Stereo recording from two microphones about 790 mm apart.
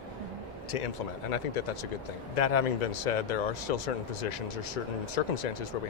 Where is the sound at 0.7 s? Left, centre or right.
Left.